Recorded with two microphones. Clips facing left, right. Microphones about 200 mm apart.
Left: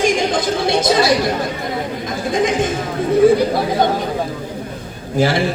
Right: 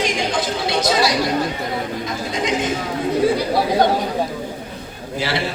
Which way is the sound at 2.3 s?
50° left (ahead or behind).